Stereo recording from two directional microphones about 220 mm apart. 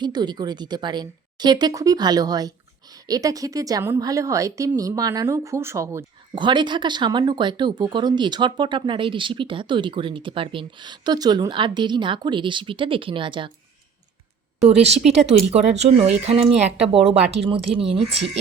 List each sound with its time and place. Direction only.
0.0 s speech: 20° right (ahead or behind)
14.6 s speech: 30° right (ahead or behind)